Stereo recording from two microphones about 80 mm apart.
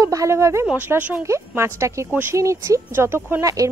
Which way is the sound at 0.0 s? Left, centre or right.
Right.